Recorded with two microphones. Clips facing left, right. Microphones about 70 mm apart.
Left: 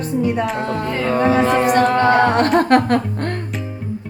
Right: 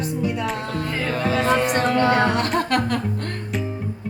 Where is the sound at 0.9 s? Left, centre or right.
Centre.